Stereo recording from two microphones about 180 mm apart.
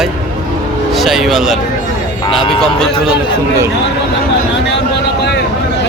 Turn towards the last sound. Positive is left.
turn(degrees=75)  # may be behind; listen again after turning